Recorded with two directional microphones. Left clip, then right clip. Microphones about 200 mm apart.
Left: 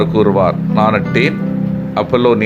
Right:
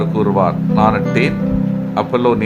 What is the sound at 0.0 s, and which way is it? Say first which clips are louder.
Speech: left 3 dB; 10° left (ahead or behind).